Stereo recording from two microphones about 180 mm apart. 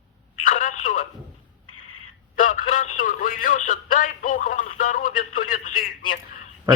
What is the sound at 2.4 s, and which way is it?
Speech, 45° left (ahead or behind).